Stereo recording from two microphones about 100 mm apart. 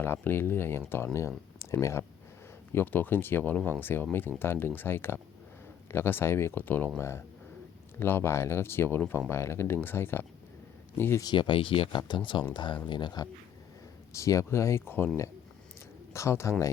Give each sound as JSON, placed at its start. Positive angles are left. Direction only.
{"t": 0.0, "sound": "speech", "side_deg": 20}
{"t": 7.9, "sound": "speech", "side_deg": 20}
{"t": 11.2, "sound": "speech", "side_deg": 50}
{"t": 14.1, "sound": "speech", "side_deg": 30}
{"t": 16.1, "sound": "speech", "side_deg": 30}